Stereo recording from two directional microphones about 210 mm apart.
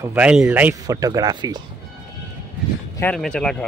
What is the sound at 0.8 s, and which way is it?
Speech, 15° right (ahead or behind).